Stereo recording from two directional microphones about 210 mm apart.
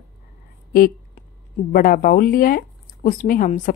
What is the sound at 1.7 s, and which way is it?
Speech, 40° left (ahead or behind).